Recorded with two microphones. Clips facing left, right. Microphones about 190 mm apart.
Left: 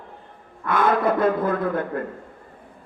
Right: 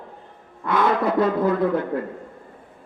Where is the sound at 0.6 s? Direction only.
50° left (ahead or behind).